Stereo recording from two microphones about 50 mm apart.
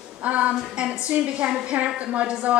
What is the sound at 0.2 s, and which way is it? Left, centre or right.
A woman's voice, right.